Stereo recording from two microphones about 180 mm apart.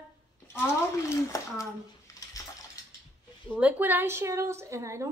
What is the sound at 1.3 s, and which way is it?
Speech, 20° left (ahead or behind).